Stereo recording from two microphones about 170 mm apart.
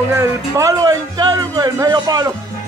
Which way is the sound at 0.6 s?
20° right (ahead or behind).